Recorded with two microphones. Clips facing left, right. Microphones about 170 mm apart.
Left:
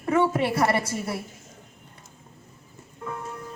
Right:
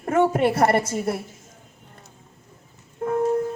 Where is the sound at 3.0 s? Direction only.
50° right (ahead or behind).